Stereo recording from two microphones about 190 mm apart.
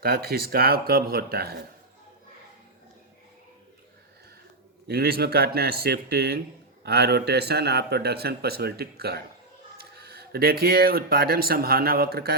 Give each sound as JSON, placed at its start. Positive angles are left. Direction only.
{"t": 0.0, "sound": "speech", "side_deg": -50}
{"t": 4.9, "sound": "a man's voice", "side_deg": -55}